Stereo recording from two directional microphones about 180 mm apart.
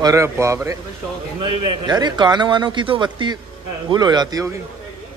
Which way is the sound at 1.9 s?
25° right (ahead or behind).